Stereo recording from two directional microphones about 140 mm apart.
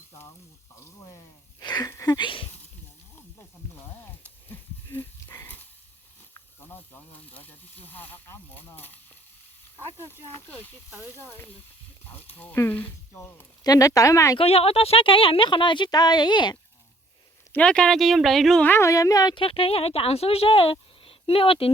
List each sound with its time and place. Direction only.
0.1 s frying: 20° left (ahead or behind)
0.8 s a sound: 20° left (ahead or behind)
3.2 s sizzle: 15° left (ahead or behind)
4.4 s a sound: 15° left (ahead or behind)
6.3 s speech: 15° left (ahead or behind)
9.7 s speech: 15° right (ahead or behind)
12.1 s speech: 10° left (ahead or behind)
13.7 s speech: 25° left (ahead or behind)
14.3 s a woman's voice: 45° left (ahead or behind)
17.5 s speech: 5° left (ahead or behind)
18.6 s a woman's voice: 15° left (ahead or behind); by 21.7 s 40° left (ahead or behind)